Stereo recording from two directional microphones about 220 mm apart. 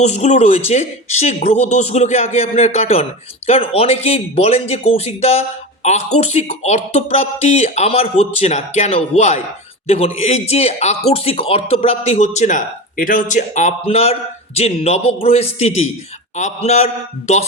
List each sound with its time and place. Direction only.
0.0 s a man's voice: 30° left (ahead or behind)